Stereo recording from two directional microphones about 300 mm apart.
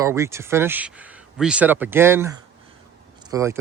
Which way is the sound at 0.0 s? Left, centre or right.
Centre.